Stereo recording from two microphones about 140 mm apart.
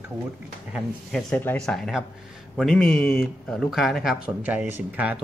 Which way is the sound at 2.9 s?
15° left (ahead or behind).